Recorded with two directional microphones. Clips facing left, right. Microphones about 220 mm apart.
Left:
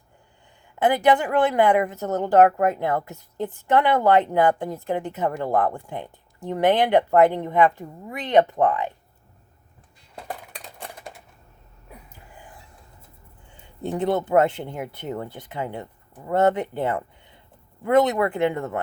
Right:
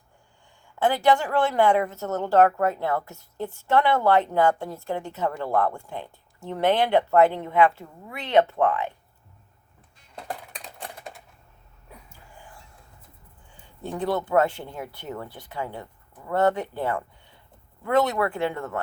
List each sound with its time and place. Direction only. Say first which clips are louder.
0.8 s a woman's voice: left 2 dB; 20° left (ahead or behind)
13.8 s speech: left 4 dB; 20° left (ahead or behind)